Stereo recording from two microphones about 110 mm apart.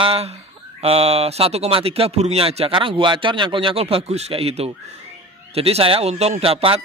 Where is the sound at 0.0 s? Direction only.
60° right (ahead or behind).